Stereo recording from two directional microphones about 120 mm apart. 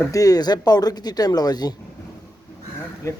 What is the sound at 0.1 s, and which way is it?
Speech, 30° left (ahead or behind).